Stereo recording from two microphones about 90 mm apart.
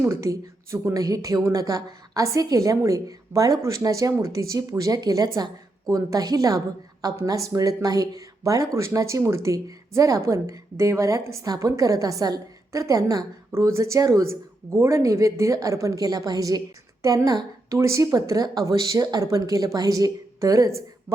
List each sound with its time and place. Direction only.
0.0 s speech: 30° right (ahead or behind)